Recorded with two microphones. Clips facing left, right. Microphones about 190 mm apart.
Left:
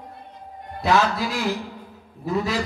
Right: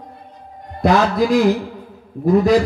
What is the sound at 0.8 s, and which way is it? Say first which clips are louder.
Speech: right 6 dB; 45° right (ahead or behind).